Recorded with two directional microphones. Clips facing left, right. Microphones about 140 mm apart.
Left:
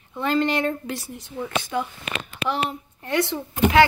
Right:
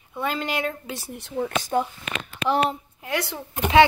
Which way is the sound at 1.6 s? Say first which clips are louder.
Right 3 dB; 40° right (ahead or behind).